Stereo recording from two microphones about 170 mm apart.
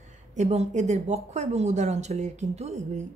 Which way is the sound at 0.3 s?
40° right (ahead or behind).